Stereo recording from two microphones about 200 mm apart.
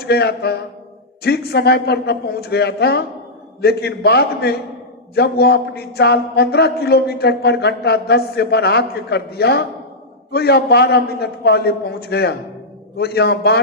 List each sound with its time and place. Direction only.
0.0 s a man's voice: 55° left (ahead or behind)